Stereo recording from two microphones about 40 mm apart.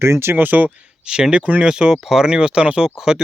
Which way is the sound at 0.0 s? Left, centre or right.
Right.